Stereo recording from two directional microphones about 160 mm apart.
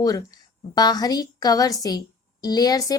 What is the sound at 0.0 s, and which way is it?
A woman's voice, 25° left (ahead or behind).